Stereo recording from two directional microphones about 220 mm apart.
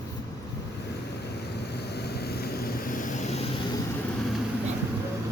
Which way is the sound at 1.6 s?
50° left (ahead or behind).